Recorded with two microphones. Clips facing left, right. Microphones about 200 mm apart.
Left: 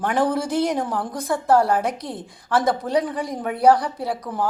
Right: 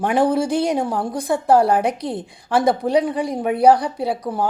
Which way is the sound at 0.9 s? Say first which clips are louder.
Right 3 dB; 30° right (ahead or behind).